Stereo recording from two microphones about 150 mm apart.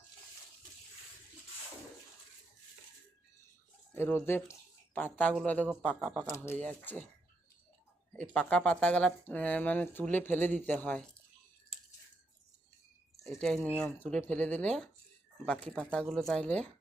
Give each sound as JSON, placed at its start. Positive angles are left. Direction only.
{"t": 3.9, "sound": "speech", "side_deg": 15}
{"t": 8.1, "sound": "speech", "side_deg": 5}
{"t": 13.3, "sound": "speech", "side_deg": 5}